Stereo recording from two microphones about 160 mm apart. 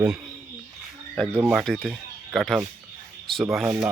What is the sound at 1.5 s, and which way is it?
Speech, centre (ahead or behind).